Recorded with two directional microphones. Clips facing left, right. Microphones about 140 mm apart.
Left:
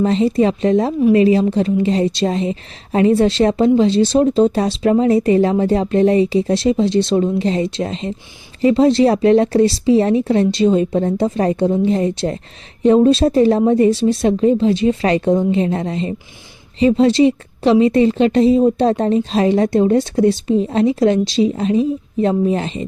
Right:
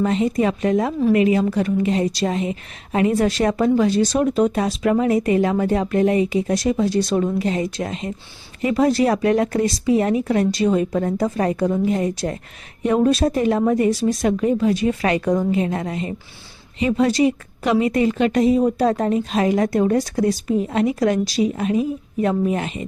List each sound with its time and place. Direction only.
0.0 s a woman's voice: 30° left (ahead or behind)